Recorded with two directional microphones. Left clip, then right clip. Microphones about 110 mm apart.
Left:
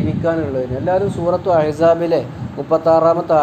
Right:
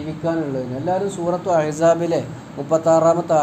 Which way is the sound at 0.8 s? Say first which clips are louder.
Left 4 dB; 10° left (ahead or behind).